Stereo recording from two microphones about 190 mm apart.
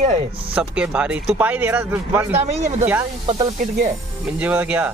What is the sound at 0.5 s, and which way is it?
Speech, 5° right (ahead or behind).